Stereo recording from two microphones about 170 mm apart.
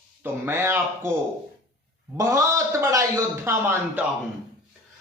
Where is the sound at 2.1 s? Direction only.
20° right (ahead or behind).